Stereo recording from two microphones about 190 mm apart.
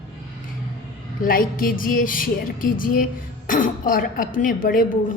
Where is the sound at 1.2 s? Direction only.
50° left (ahead or behind).